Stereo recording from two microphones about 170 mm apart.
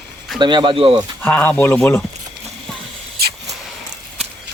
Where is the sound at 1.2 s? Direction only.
10° left (ahead or behind).